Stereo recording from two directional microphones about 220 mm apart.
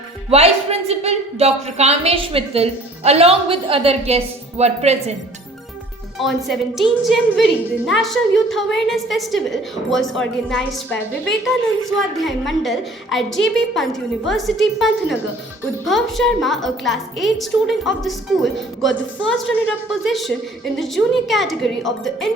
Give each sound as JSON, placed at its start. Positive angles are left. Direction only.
{"t": 0.3, "sound": "speech", "side_deg": -30}
{"t": 6.1, "sound": "a woman's voice", "side_deg": 0}
{"t": 20.1, "sound": "a woman's voice", "side_deg": 0}